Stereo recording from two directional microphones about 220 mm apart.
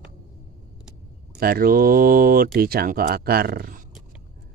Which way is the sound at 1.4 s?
40° right (ahead or behind).